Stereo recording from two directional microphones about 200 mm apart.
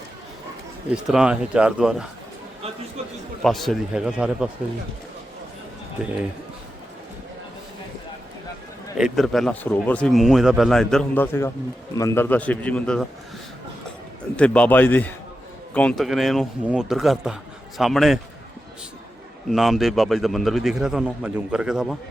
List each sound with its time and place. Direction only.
1.0 s speech: 5° right (ahead or behind)
3.4 s speech: centre (ahead or behind)
9.0 s a man's voice: centre (ahead or behind)
14.3 s a man's voice: 5° left (ahead or behind)
19.5 s speech: centre (ahead or behind)